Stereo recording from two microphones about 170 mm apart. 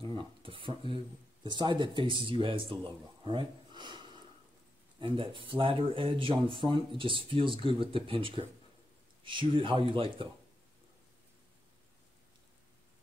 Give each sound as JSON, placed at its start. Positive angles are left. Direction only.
{"t": 0.4, "sound": "speech", "side_deg": -30}
{"t": 5.0, "sound": "speech", "side_deg": -30}